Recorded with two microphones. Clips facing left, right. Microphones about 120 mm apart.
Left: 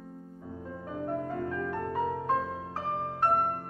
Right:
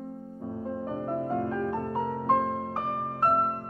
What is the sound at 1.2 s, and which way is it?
Music, 35° right (ahead or behind).